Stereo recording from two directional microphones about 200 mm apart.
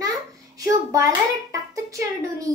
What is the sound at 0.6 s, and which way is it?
A child's voice, 15° right (ahead or behind).